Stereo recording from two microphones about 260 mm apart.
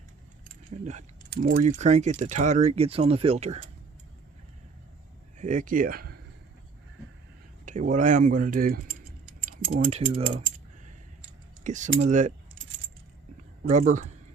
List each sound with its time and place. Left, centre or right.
0.9 s speech: right
5.4 s speech: right
7.6 s speech: right
11.6 s speech: right
13.7 s speech: right